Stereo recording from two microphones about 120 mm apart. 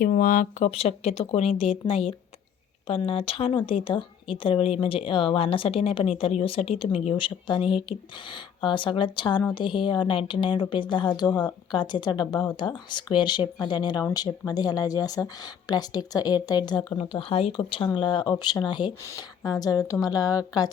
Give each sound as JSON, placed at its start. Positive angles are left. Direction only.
{"t": 0.6, "sound": "a woman's voice", "side_deg": 65}
{"t": 17.0, "sound": "a woman's voice", "side_deg": 50}